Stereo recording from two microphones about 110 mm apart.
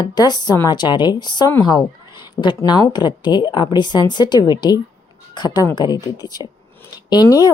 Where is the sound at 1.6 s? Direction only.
40° left (ahead or behind).